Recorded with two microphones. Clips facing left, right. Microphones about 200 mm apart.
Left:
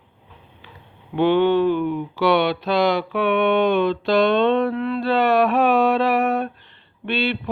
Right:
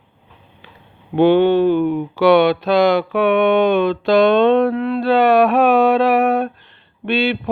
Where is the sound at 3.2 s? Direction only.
50° right (ahead or behind).